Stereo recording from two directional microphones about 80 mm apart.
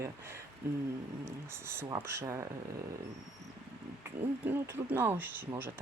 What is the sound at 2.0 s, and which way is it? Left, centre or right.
Speech, right.